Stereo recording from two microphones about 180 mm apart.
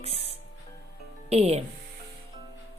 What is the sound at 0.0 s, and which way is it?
Music, 35° right (ahead or behind).